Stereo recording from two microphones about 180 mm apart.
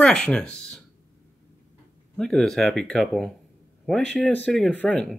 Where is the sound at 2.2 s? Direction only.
5° left (ahead or behind).